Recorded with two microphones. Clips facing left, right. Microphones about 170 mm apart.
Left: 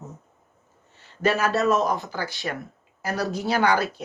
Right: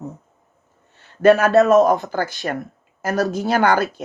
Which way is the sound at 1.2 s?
60° right (ahead or behind).